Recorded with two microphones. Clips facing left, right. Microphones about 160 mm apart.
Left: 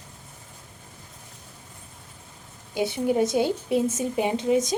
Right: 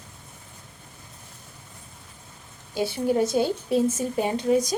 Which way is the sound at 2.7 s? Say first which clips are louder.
Even; 20° left (ahead or behind).